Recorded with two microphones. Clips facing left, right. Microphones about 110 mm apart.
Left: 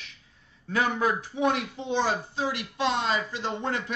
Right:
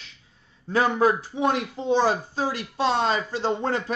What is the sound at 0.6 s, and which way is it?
A man's voice, 25° right (ahead or behind).